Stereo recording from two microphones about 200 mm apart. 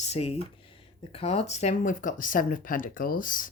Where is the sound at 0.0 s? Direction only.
30° left (ahead or behind).